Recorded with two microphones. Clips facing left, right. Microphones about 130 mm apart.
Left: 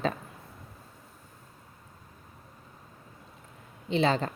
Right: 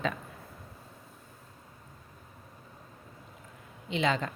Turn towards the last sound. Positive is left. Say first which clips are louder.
# left 3 dB
turn(degrees=35)  # may be behind; listen again after turning